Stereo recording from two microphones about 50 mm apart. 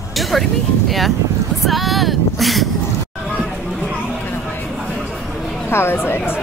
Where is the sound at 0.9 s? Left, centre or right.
Centre.